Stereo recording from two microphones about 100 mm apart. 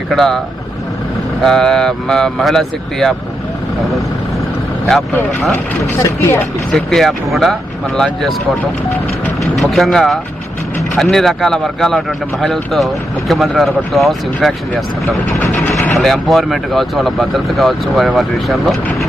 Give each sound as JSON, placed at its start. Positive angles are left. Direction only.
{"t": 0.1, "sound": "speech", "side_deg": 5}
{"t": 4.9, "sound": "speech", "side_deg": 5}
{"t": 6.0, "sound": "speech", "side_deg": 25}
{"t": 6.7, "sound": "speech", "side_deg": 5}
{"t": 9.4, "sound": "speech", "side_deg": 0}
{"t": 15.4, "sound": "speech", "side_deg": 15}
{"t": 16.0, "sound": "speech", "side_deg": 0}